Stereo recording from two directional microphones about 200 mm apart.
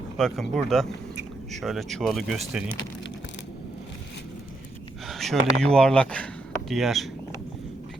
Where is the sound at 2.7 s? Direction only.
65° left (ahead or behind).